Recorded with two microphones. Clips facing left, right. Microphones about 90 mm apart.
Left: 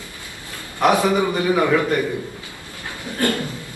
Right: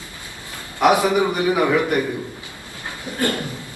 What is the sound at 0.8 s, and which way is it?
A man's voice, 15° right (ahead or behind).